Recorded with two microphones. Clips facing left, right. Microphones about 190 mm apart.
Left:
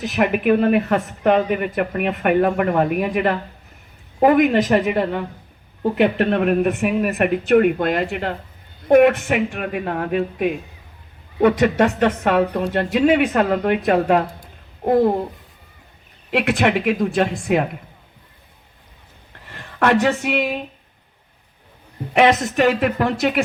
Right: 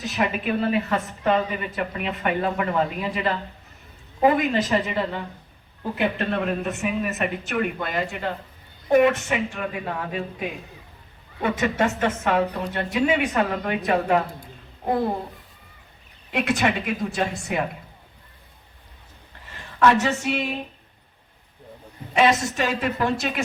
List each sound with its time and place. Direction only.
0.0 s speech: 60° left (ahead or behind)
16.3 s speech: 65° left (ahead or behind)
19.5 s speech: 60° left (ahead or behind)
22.1 s speech: 70° left (ahead or behind)